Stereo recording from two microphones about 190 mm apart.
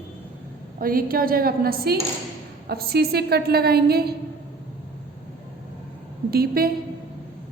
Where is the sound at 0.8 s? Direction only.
50° right (ahead or behind).